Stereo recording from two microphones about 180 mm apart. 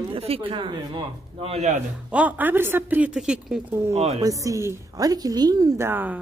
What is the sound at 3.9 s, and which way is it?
Speech, 35° right (ahead or behind).